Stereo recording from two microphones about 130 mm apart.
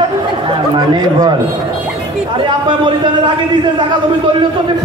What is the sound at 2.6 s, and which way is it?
A man's voice, 40° right (ahead or behind).